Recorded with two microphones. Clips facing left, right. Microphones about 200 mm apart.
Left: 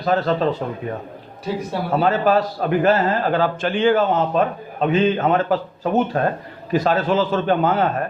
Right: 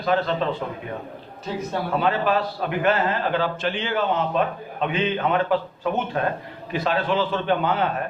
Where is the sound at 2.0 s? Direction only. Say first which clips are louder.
Left 6 dB; 40° left (ahead or behind).